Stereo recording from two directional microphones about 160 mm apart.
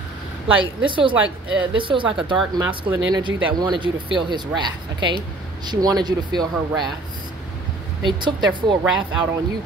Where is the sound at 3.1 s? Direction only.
30° right (ahead or behind).